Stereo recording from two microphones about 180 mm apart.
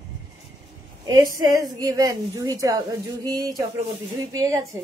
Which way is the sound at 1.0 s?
20° right (ahead or behind).